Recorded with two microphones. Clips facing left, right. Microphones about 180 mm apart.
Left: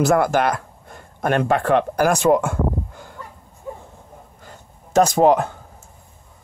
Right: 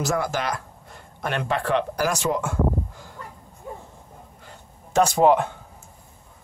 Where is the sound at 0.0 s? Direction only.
55° left (ahead or behind).